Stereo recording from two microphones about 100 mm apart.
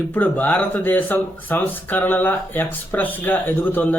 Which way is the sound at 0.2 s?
15° left (ahead or behind).